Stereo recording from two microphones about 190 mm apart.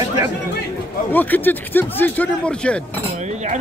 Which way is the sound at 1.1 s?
10° left (ahead or behind).